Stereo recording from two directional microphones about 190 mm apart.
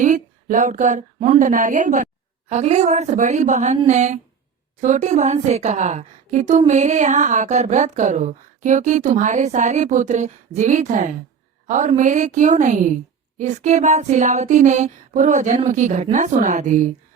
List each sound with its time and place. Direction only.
0.0 s a woman's voice: 40° right (ahead or behind)